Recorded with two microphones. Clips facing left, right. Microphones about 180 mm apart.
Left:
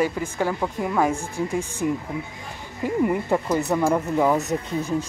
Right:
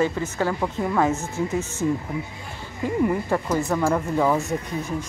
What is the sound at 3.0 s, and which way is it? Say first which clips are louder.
Speech: left 1 dB; 15° left (ahead or behind).